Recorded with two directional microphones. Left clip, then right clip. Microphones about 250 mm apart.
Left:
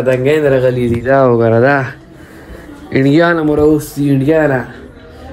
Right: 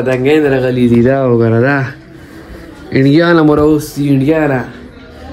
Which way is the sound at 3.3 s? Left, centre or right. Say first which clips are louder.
Right 4 dB; right.